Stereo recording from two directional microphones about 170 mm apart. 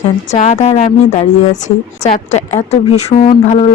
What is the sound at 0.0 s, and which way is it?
A woman's voice, 45° left (ahead or behind).